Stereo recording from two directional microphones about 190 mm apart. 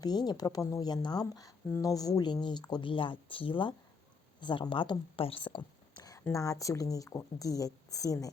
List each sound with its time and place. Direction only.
0.0 s a woman's voice: 20° left (ahead or behind)